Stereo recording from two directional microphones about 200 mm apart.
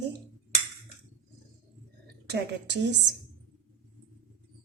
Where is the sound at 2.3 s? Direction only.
60° right (ahead or behind).